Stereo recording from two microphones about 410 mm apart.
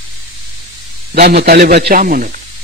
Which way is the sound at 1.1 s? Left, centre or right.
Right.